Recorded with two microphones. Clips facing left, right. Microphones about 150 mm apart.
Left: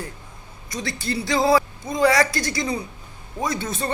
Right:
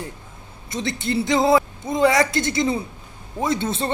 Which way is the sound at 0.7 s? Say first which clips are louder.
Right 3 dB; 20° right (ahead or behind).